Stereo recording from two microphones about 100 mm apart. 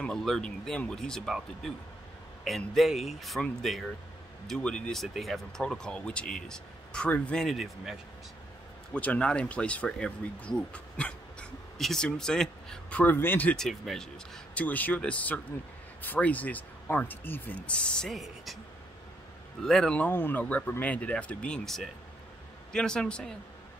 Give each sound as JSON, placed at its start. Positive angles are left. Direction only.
{"t": 0.0, "sound": "speech", "side_deg": 5}
{"t": 8.9, "sound": "speech", "side_deg": 15}
{"t": 13.0, "sound": "speech", "side_deg": 20}
{"t": 13.6, "sound": "speech", "side_deg": 5}
{"t": 19.6, "sound": "speech", "side_deg": 5}